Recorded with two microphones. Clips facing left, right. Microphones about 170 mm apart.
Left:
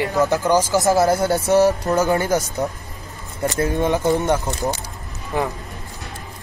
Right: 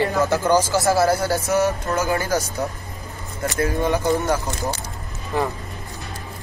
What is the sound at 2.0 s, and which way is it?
Speech, 20° left (ahead or behind).